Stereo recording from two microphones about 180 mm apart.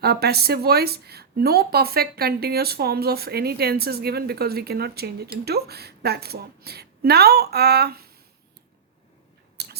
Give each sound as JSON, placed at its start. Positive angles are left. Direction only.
{"t": 0.0, "sound": "a woman's voice", "side_deg": -65}